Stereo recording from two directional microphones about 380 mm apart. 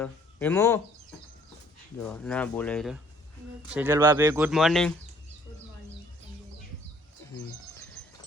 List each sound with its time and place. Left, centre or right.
0.0 s speech: centre
2.0 s speech: centre